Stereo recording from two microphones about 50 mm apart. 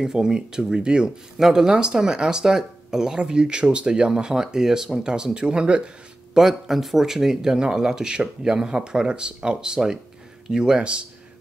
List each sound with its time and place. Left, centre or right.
0.0 s speech: centre
6.3 s speech: centre; by 11.1 s right